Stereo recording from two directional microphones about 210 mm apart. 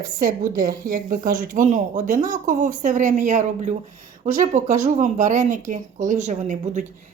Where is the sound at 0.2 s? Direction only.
40° right (ahead or behind).